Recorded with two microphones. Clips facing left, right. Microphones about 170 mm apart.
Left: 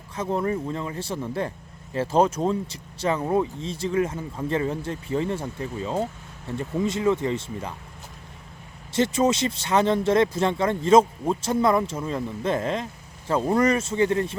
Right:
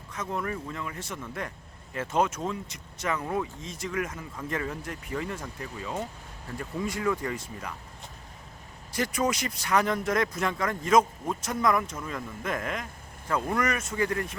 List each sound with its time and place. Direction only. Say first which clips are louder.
0.1 s speech: left 7 dB; 30° left (ahead or behind)
8.9 s speech: left 7 dB; 25° left (ahead or behind)